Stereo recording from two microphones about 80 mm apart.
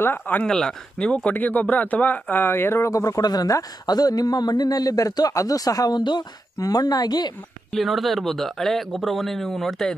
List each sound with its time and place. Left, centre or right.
0.0 s speech: left
0.5 s speech: centre; by 7.3 s left
7.7 s speech: centre